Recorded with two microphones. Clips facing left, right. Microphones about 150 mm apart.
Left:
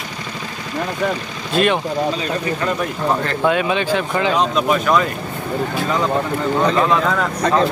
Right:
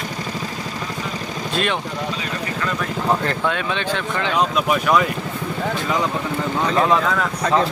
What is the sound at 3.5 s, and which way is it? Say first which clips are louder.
Speech: left 9 dB; 10° left (ahead or behind).